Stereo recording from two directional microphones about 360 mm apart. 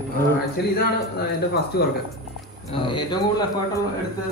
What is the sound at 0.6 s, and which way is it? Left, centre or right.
Speech, left.